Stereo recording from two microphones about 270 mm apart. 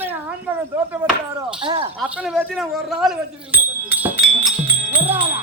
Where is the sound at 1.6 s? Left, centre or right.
Centre.